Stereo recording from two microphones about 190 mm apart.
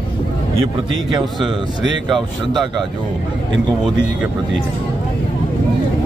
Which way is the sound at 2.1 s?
Centre (ahead or behind).